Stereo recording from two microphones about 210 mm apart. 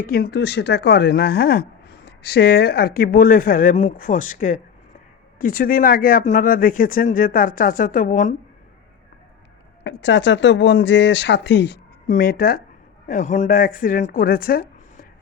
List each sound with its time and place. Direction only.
0.0 s speech: 45° left (ahead or behind)
9.8 s speech: 60° left (ahead or behind)
12.0 s speech: 40° left (ahead or behind)